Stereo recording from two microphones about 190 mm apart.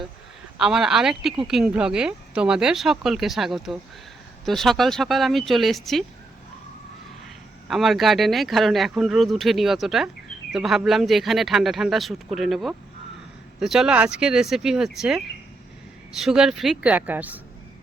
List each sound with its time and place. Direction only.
0.6 s speech: 5° right (ahead or behind)
7.7 s speech: centre (ahead or behind)